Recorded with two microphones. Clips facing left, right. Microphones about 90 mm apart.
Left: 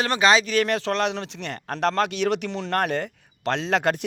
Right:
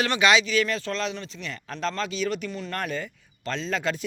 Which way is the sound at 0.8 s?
70° left (ahead or behind).